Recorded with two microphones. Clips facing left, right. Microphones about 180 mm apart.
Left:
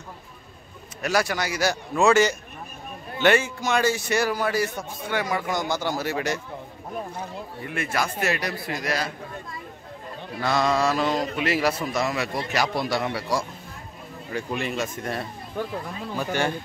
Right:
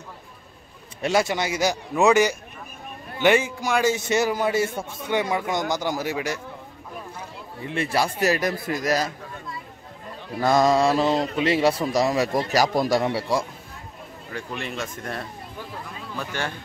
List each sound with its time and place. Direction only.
1.0 s a man's voice: 25° right (ahead or behind); by 6.4 s 10° right (ahead or behind)
7.6 s a man's voice: 30° right (ahead or behind)
10.4 s a man's voice: 45° right (ahead or behind); by 13.5 s 25° right (ahead or behind)
14.3 s speech: 10° left (ahead or behind)